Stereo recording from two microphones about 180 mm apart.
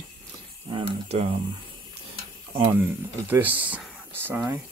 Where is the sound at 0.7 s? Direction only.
30° right (ahead or behind).